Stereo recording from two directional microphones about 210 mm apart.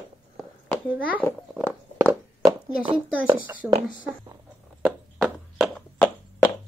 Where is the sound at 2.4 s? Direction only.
20° right (ahead or behind).